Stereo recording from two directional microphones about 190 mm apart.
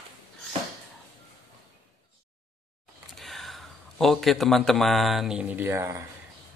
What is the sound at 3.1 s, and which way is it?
A man's voice, centre (ahead or behind).